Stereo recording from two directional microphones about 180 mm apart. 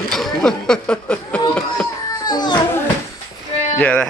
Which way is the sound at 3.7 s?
10° left (ahead or behind).